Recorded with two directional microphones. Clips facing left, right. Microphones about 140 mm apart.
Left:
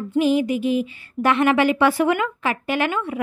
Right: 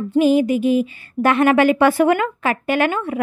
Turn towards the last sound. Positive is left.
turn(degrees=-50)  # may be behind; listen again after turning